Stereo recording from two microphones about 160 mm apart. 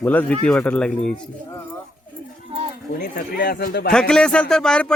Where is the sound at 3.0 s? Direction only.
70° left (ahead or behind).